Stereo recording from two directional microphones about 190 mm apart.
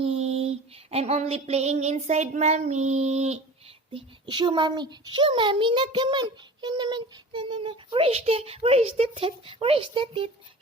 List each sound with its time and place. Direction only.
0.0 s a sound: 35° right (ahead or behind)
0.9 s child singing: 30° right (ahead or behind)
3.9 s a child's voice: 25° right (ahead or behind)